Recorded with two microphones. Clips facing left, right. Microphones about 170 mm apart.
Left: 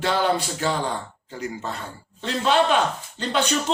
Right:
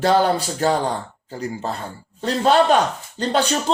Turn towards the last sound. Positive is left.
turn(degrees=-35)  # may be behind; listen again after turning